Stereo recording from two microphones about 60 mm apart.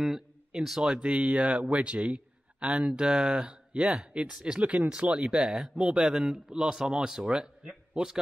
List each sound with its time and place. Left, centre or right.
0.0 s speech: centre